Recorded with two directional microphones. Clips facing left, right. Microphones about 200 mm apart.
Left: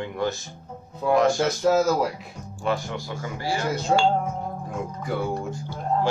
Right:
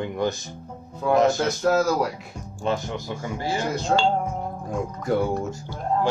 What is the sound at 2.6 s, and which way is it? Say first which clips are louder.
Speech: right 1 dB; 20° right (ahead or behind).